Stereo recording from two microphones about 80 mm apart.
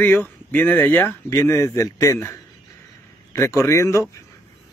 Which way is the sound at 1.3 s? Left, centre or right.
Left.